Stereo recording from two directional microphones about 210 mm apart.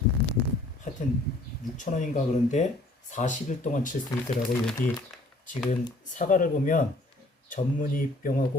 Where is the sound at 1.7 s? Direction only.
35° left (ahead or behind).